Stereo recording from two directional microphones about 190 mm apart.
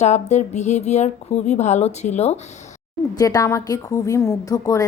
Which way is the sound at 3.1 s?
20° left (ahead or behind).